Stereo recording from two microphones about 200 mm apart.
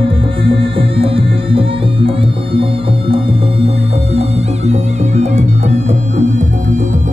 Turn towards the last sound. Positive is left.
turn(degrees=-35)  # may be behind; listen again after turning